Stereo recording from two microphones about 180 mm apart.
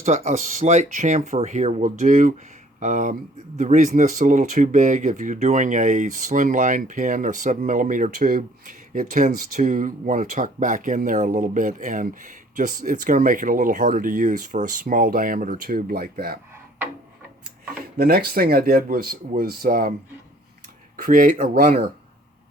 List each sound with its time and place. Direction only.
0.0 s speech: 40° right (ahead or behind); by 16.4 s 55° right (ahead or behind)
17.9 s speech: 55° right (ahead or behind)
20.9 s speech: 50° right (ahead or behind)